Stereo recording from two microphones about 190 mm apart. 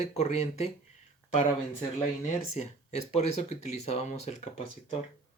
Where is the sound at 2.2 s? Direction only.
35° left (ahead or behind).